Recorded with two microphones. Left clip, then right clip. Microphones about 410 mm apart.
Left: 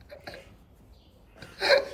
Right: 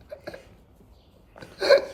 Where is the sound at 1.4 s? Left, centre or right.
Centre.